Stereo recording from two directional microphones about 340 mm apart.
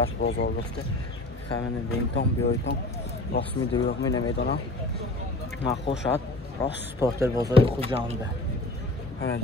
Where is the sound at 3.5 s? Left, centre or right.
Centre.